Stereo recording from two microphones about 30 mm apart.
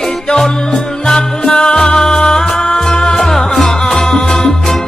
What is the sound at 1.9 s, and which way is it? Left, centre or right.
Music, centre.